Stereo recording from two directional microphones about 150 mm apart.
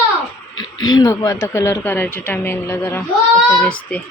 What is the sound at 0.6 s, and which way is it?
Speech, 25° left (ahead or behind).